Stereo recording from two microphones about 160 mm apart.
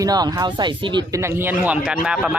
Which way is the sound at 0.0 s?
25° right (ahead or behind).